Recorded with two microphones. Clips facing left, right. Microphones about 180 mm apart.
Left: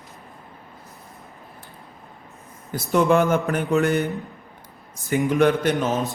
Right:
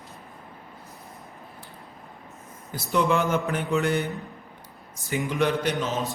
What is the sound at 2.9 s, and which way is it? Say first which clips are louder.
Speech: left 5 dB; 50° left (ahead or behind).